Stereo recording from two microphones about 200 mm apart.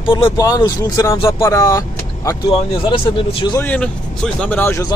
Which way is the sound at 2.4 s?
25° left (ahead or behind).